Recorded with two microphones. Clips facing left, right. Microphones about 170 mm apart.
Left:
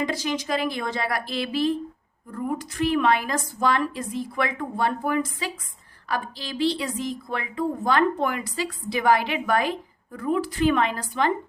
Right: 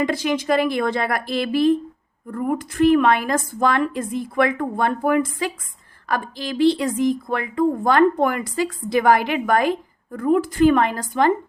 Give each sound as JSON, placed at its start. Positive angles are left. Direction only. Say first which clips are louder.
{"t": 0.0, "sound": "a woman's voice", "louder": "right 5 dB", "side_deg": -55}